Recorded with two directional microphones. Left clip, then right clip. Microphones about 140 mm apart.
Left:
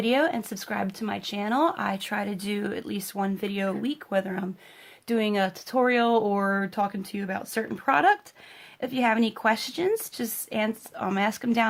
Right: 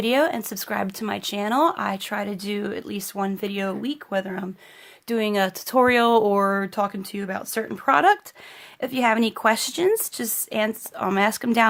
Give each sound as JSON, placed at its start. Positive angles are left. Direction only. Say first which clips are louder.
{"t": 0.0, "sound": "speech", "louder": "right 3 dB", "side_deg": -35}